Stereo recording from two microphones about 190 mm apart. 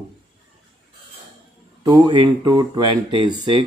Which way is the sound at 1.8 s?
20° right (ahead or behind).